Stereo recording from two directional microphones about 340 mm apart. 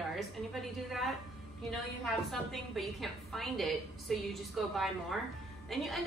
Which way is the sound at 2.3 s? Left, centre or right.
Centre.